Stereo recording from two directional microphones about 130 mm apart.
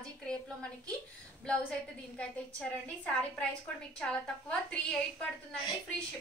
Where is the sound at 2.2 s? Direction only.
10° left (ahead or behind).